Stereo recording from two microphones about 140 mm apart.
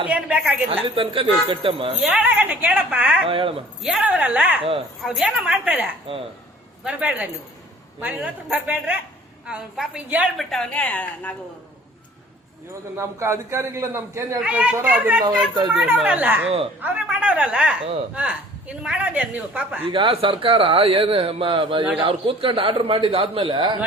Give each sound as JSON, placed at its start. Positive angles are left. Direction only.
{"t": 0.1, "sound": "a man's voice", "side_deg": -10}
{"t": 0.9, "sound": "speech", "side_deg": -40}
{"t": 2.0, "sound": "a man's voice", "side_deg": -5}
{"t": 3.2, "sound": "speech", "side_deg": -40}
{"t": 3.8, "sound": "a man's voice", "side_deg": -10}
{"t": 10.5, "sound": "a woman's voice", "side_deg": 5}
{"t": 13.0, "sound": "a man's voice", "side_deg": -20}
{"t": 14.4, "sound": "a man's voice", "side_deg": -10}
{"t": 19.8, "sound": "speech", "side_deg": -40}